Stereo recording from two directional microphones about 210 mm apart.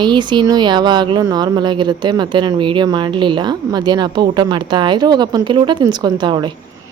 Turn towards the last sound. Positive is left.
turn(degrees=-20)  # may be behind; listen again after turning